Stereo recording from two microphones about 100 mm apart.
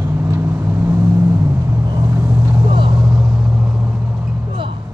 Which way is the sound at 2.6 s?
55° right (ahead or behind).